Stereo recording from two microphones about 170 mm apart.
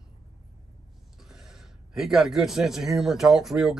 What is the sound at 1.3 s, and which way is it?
Speech, 5° right (ahead or behind).